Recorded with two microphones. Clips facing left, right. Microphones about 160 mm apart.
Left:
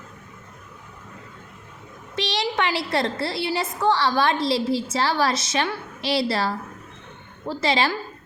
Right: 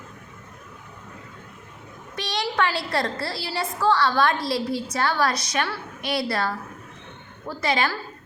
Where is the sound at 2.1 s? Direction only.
25° left (ahead or behind).